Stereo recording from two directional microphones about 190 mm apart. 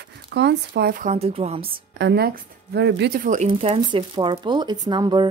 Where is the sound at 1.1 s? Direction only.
30° right (ahead or behind).